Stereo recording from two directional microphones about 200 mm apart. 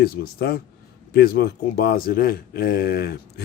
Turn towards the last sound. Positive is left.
turn(degrees=50)  # may be behind; listen again after turning